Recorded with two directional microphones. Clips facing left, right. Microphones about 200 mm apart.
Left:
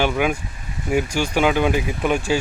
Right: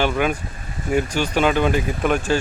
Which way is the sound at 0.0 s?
10° left (ahead or behind).